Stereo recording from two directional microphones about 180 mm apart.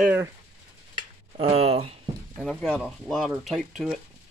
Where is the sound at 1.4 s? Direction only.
35° right (ahead or behind).